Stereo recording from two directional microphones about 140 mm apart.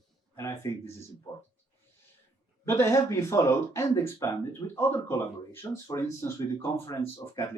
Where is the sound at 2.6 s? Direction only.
20° left (ahead or behind).